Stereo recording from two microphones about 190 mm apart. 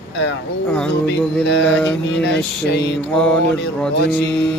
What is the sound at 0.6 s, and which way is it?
Mantra, 5° left (ahead or behind).